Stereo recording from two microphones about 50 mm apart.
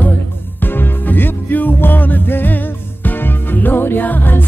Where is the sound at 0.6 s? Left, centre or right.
Left.